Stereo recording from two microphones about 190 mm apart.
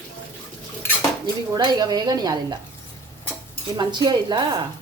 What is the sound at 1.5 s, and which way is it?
A woman's voice, 20° right (ahead or behind).